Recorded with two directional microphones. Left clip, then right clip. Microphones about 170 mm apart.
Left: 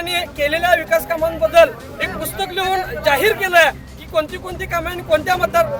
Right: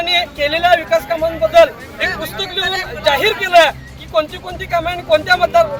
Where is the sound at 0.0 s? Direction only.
20° left (ahead or behind).